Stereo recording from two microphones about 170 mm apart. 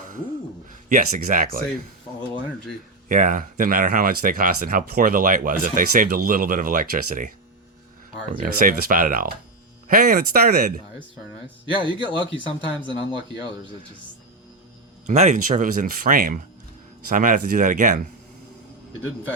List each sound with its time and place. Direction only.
0.7 s speech: 50° right (ahead or behind)
3.1 s speech: 50° right (ahead or behind)
11.9 s speech: 30° right (ahead or behind)
15.0 s speech: 45° right (ahead or behind)